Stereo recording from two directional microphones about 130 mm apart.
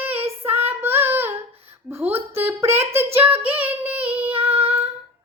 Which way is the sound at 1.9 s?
15° right (ahead or behind).